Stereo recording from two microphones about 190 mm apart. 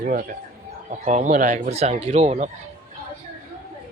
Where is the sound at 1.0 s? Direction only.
40° right (ahead or behind).